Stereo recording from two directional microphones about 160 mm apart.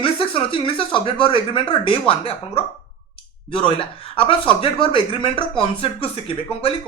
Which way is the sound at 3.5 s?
30° left (ahead or behind).